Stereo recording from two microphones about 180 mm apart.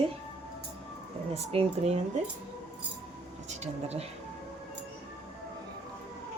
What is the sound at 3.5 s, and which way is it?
Speech, 35° right (ahead or behind).